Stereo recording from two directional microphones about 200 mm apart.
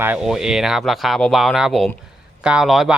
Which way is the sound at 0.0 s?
5° right (ahead or behind).